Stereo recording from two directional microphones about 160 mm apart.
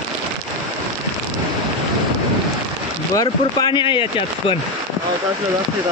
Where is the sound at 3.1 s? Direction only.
30° left (ahead or behind).